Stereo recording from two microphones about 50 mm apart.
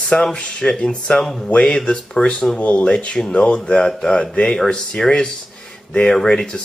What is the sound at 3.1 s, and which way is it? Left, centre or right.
Speech, centre.